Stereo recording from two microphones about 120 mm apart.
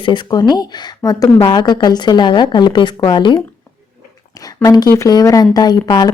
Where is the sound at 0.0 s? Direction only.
40° left (ahead or behind).